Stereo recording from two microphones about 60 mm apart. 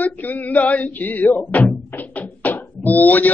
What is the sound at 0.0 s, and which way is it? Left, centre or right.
Music, left.